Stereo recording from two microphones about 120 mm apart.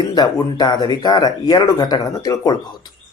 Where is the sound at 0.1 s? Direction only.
35° left (ahead or behind).